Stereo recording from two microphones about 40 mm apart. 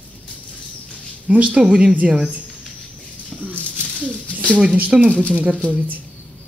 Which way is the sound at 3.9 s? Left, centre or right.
Right.